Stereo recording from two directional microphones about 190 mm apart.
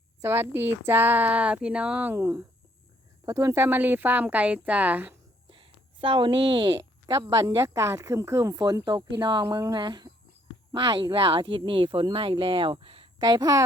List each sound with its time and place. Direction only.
0.2 s a woman's voice: 10° right (ahead or behind)
5.5 s a woman's voice: 25° right (ahead or behind)